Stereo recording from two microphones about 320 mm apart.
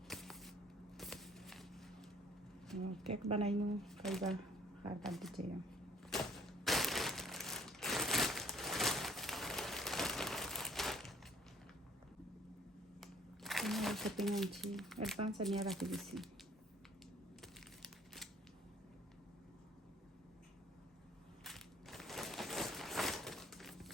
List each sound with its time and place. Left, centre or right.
0.1 s a sound: centre
3.2 s speech: centre
3.8 s speech: centre
6.1 s crushing: centre
13.0 s shuffling cards: centre
15.3 s speech: centre
17.4 s crumpling: centre
21.4 s a sound: centre